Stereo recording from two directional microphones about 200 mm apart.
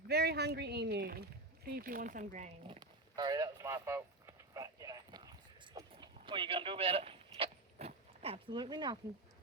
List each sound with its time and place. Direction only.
0.1 s speech: 55° right (ahead or behind)
2.6 s a sound: 20° right (ahead or behind)
5.9 s vehicle: 25° right (ahead or behind)